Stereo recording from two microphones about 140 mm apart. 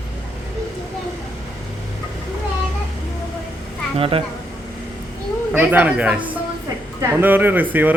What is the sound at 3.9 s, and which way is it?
Speech, 40° right (ahead or behind).